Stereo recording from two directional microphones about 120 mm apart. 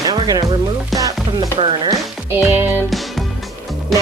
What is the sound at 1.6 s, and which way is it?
Speech, 50° right (ahead or behind).